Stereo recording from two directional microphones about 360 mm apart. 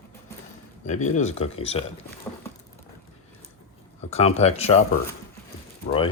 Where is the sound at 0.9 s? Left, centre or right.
Centre.